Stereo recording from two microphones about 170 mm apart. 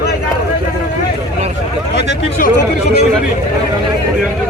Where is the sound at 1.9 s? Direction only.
75° left (ahead or behind).